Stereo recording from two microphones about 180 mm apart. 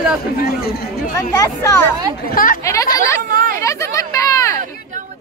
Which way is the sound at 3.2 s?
50° right (ahead or behind).